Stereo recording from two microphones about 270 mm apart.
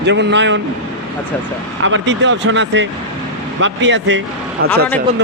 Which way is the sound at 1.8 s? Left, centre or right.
Right.